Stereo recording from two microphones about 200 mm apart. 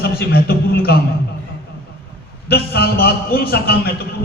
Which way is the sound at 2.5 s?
50° left (ahead or behind).